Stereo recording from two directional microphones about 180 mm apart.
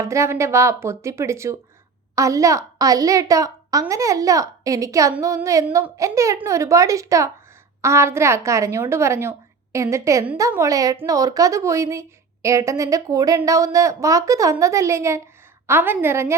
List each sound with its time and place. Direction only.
0.0 s a woman's voice: 15° right (ahead or behind)